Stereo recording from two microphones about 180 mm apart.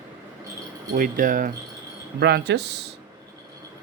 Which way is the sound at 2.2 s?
70° right (ahead or behind).